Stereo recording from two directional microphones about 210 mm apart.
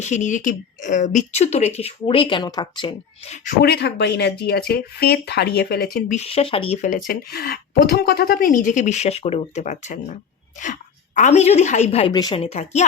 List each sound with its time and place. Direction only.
0.0 s speech: 35° left (ahead or behind)
3.6 s speech: 50° left (ahead or behind)
6.1 s speech: 25° left (ahead or behind)
6.8 s speech: 40° left (ahead or behind)